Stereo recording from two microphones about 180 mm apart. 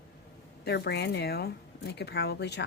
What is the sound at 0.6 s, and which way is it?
A woman's voice, 65° left (ahead or behind).